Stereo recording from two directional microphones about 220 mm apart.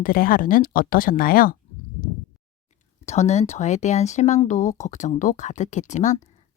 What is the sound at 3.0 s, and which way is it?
Speech, 30° left (ahead or behind).